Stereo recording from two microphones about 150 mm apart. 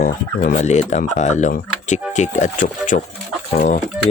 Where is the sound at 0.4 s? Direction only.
55° left (ahead or behind).